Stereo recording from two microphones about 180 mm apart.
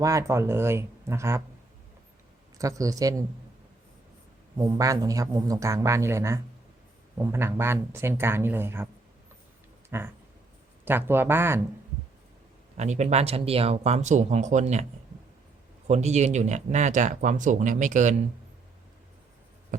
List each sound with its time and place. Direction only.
0.0 s speech: 15° right (ahead or behind)
2.6 s speech: 20° right (ahead or behind)
4.5 s speech: 20° right (ahead or behind)
9.9 s speech: 15° right (ahead or behind)
12.7 s speech: 40° right (ahead or behind)
15.9 s speech: 40° right (ahead or behind)
19.7 s a sound: 45° right (ahead or behind)